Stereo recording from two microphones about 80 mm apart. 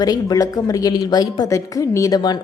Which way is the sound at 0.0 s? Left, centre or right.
Left.